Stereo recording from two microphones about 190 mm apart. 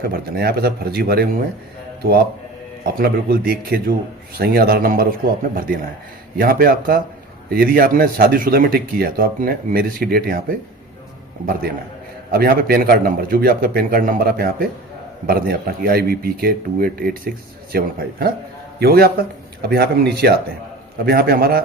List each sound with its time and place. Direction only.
0.0 s speech: 55° right (ahead or behind)
12.3 s speech: 50° right (ahead or behind)